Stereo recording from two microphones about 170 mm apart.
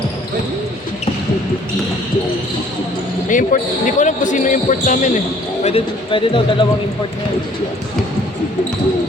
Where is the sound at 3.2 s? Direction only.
50° left (ahead or behind).